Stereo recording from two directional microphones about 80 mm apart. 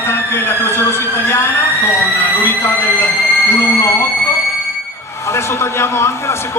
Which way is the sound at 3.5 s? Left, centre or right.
Left.